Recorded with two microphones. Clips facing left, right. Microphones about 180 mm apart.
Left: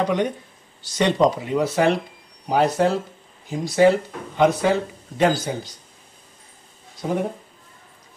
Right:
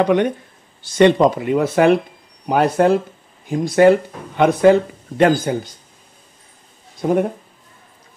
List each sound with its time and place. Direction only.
0.0 s speech: 60° right (ahead or behind)
7.0 s speech: 55° right (ahead or behind)